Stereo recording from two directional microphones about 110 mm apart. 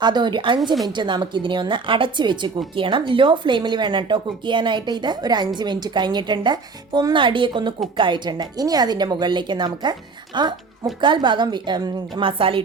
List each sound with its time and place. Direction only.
0.0 s speech: 40° right (ahead or behind)